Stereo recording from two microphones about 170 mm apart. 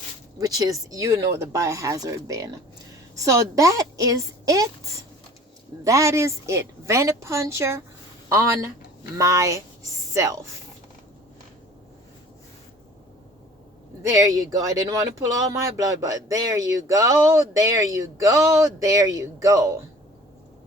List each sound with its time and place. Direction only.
0.3 s a woman's voice: 20° right (ahead or behind)
14.0 s speech: 20° right (ahead or behind)